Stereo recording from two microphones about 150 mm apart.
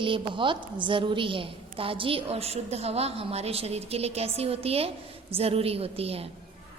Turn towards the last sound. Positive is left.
turn(degrees=-40)  # may be behind; listen again after turning